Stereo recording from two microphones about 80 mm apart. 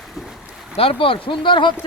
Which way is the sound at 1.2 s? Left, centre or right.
Left.